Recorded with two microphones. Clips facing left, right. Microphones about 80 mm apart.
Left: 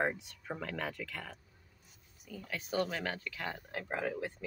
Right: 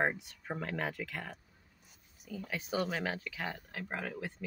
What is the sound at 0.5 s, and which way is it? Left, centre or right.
Speech, right.